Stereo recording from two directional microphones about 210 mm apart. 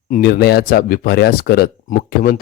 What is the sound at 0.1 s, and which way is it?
Speech, 45° left (ahead or behind).